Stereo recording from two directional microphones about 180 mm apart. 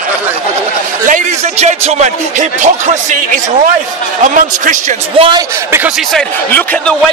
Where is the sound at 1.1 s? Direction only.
40° right (ahead or behind).